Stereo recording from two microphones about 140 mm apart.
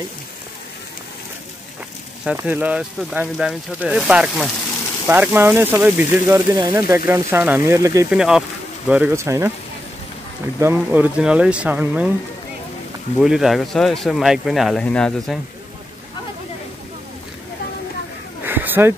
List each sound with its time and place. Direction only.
2.3 s speech: 15° right (ahead or behind)
8.1 s speech: 5° right (ahead or behind)
9.1 s speech: 20° right (ahead or behind)
10.6 s speech: 15° right (ahead or behind)
13.2 s speech: centre (ahead or behind)
18.4 s a sound: 15° right (ahead or behind)